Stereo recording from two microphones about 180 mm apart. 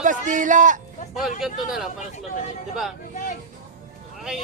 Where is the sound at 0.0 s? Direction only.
45° right (ahead or behind).